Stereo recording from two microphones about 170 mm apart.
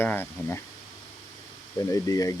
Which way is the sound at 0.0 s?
10° left (ahead or behind).